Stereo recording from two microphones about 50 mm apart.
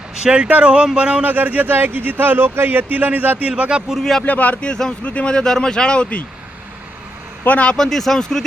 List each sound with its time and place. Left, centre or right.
0.2 s speech: centre
1.2 s speech: right
3.5 s speech: right
4.3 s speech: left
7.4 s speech: left
7.8 s speech: centre